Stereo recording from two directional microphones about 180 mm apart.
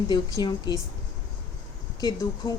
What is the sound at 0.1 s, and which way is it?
Speech, 20° left (ahead or behind).